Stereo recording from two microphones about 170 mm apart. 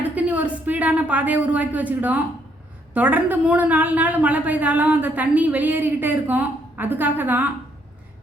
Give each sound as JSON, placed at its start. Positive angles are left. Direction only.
{"t": 0.0, "sound": "a woman's voice", "side_deg": -10}